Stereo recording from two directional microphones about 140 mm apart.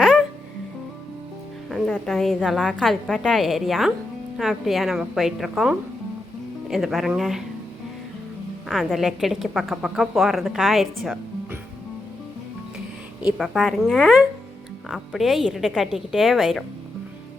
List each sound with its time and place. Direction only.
0.0 s music: 5° right (ahead or behind)
1.7 s a woman's voice: centre (ahead or behind)
8.7 s a woman's voice: centre (ahead or behind)
13.4 s a woman's voice: centre (ahead or behind)